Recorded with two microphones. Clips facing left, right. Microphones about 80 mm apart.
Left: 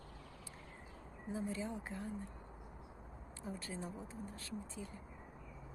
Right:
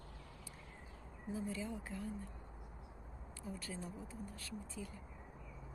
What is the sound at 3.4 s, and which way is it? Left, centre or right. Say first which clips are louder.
Speech: left 2 dB; left.